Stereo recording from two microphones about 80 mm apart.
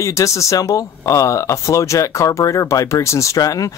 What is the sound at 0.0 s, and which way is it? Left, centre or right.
Speech, left.